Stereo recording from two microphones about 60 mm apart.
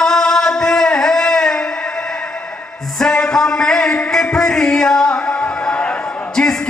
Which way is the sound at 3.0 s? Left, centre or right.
Centre.